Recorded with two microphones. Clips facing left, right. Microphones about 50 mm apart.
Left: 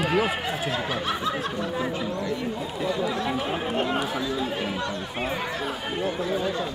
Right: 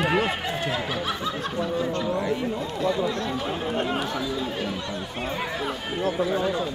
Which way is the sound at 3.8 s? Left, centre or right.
Centre.